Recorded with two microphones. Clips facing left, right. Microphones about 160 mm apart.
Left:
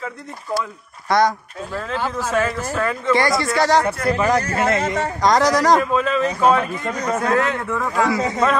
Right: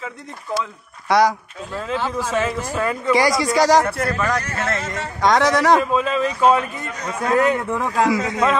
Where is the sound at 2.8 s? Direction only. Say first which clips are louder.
Right 1 dB; 15° right (ahead or behind).